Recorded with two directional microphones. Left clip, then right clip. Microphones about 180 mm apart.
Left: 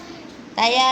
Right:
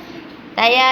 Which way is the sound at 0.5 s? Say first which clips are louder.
Right 4 dB; 10° left (ahead or behind).